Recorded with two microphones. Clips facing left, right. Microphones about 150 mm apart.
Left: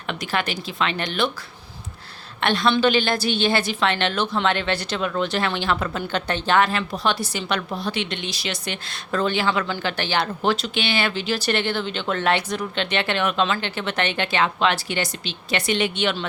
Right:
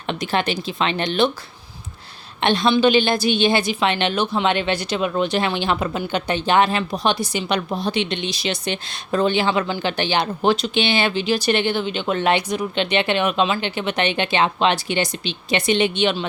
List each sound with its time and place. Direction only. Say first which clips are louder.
0.1 s a woman's voice: right 4 dB; 25° right (ahead or behind)
2.4 s a woman's voice: right 3 dB; 20° right (ahead or behind)